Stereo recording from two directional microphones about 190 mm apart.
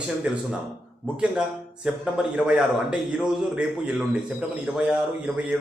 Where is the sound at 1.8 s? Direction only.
Centre (ahead or behind).